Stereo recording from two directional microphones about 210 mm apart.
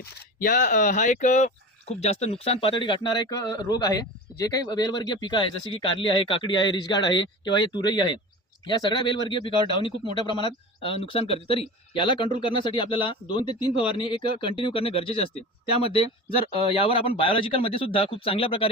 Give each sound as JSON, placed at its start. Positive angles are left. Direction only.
{"t": 0.3, "sound": "speech", "side_deg": 40}